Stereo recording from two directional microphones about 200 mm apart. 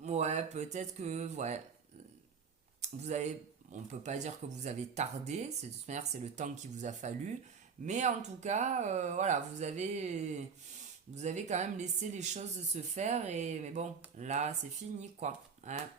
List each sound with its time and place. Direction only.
0.0 s speech: 35° right (ahead or behind)
2.8 s speech: 35° right (ahead or behind)